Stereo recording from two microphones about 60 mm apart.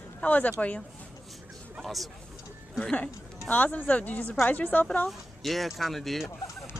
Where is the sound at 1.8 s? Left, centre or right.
Centre.